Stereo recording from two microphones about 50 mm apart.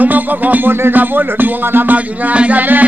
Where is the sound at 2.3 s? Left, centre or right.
Right.